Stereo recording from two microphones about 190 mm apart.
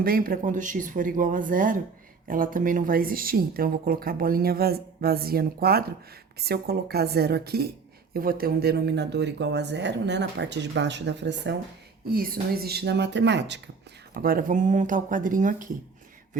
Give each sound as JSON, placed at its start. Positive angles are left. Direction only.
{"t": 0.0, "sound": "a woman's voice", "side_deg": -50}
{"t": 12.0, "sound": "speech", "side_deg": -50}
{"t": 14.1, "sound": "a woman's voice", "side_deg": -50}